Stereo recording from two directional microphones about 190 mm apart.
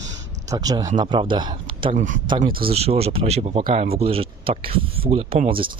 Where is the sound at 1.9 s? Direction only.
40° right (ahead or behind).